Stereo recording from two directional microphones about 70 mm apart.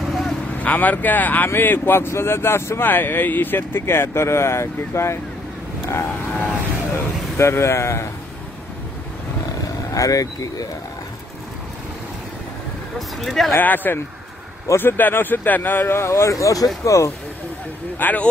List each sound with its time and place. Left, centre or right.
0.1 s vehicle: centre
0.5 s speech: left
7.0 s speech: left
9.9 s speech: left
13.2 s speech: centre
13.5 s speech: left
17.9 s speech: left